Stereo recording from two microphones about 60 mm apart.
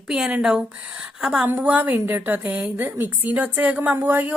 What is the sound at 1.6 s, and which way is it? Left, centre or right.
A woman's voice, right.